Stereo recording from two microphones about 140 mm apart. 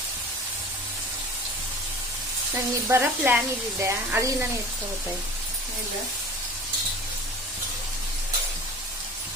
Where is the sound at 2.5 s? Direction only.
20° right (ahead or behind).